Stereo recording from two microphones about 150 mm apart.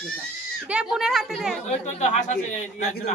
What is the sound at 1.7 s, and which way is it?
A man's voice, 45° left (ahead or behind).